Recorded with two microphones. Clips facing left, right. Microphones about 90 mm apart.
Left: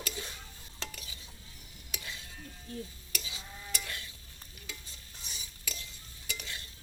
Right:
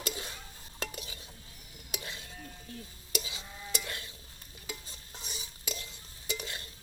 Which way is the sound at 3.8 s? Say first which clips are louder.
Right 2 dB; 35° right (ahead or behind).